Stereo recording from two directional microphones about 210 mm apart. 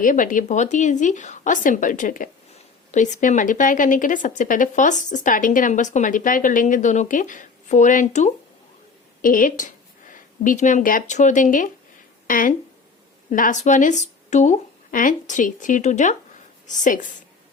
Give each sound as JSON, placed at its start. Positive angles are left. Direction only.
{"t": 0.0, "sound": "a woman's voice", "side_deg": 40}